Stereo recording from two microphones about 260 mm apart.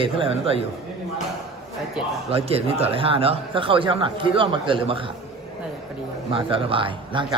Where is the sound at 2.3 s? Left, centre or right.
Right.